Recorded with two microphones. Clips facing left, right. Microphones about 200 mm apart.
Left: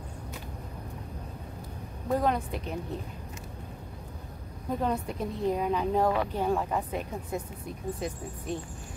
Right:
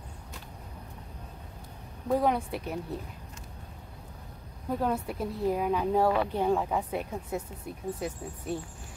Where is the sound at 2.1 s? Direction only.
10° right (ahead or behind).